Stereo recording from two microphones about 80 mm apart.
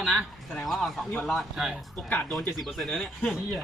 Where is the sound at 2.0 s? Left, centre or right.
Centre.